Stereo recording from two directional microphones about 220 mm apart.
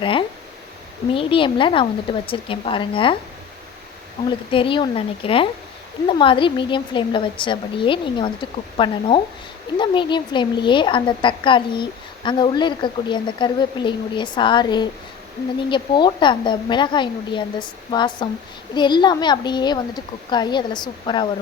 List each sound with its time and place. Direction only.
0.0 s a woman's voice: 20° left (ahead or behind)
4.3 s a woman's voice: 25° left (ahead or behind)